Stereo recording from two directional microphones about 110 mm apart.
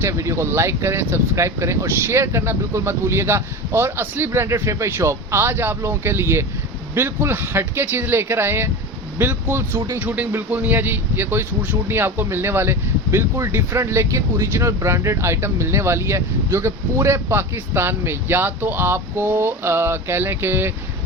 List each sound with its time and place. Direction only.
0.0 s a man's voice: 25° right (ahead or behind)